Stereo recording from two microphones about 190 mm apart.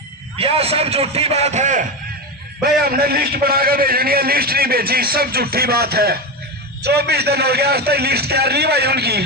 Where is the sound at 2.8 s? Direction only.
55° right (ahead or behind).